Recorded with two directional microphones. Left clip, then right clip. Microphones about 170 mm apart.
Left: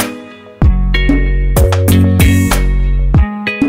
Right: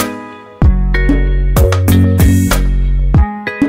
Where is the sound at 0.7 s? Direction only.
20° left (ahead or behind).